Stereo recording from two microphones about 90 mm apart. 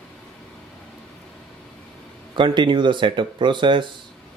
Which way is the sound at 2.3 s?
60° right (ahead or behind).